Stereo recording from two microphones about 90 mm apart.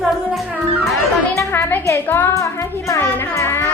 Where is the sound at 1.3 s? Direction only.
30° left (ahead or behind).